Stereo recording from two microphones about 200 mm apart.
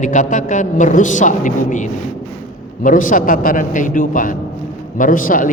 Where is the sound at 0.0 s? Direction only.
40° left (ahead or behind).